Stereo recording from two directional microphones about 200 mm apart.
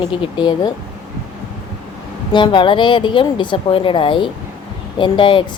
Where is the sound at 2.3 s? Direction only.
25° left (ahead or behind).